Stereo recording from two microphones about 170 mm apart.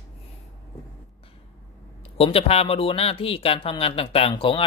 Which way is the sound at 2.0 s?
35° left (ahead or behind).